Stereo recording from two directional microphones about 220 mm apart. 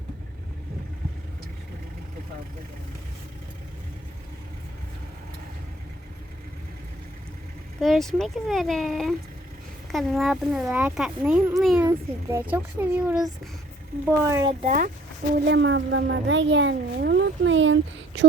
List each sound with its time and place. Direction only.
7.8 s speech: centre (ahead or behind)
14.6 s speech: 35° right (ahead or behind)
15.4 s speech: 60° right (ahead or behind)